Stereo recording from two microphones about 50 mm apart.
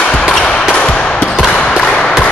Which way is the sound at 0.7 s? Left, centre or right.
Left.